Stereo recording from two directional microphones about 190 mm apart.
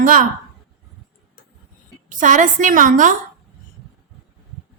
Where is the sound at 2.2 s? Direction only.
40° right (ahead or behind).